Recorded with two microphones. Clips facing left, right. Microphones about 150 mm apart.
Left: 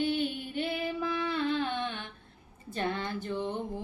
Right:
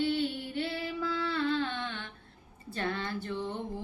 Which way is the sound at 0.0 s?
20° left (ahead or behind).